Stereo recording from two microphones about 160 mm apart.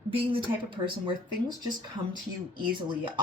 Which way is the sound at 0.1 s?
35° right (ahead or behind).